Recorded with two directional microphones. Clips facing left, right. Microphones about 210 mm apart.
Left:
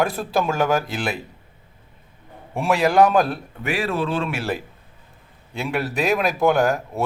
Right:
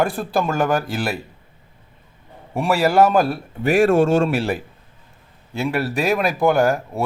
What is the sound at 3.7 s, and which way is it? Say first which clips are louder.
Speech: right 9 dB; 45° right (ahead or behind).